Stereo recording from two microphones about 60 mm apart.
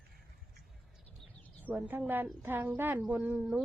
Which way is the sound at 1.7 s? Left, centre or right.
Right.